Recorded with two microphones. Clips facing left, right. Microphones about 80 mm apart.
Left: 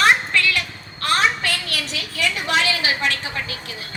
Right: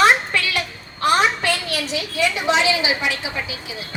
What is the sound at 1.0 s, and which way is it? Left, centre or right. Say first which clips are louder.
A woman's voice: right 3 dB; right.